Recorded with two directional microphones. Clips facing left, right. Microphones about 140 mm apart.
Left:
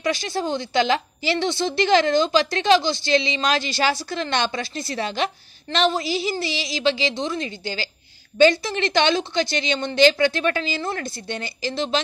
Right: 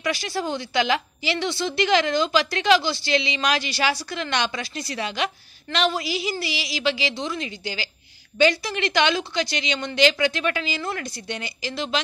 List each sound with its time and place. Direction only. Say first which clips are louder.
0.0 s a woman's voice: left 2 dB; 25° left (ahead or behind)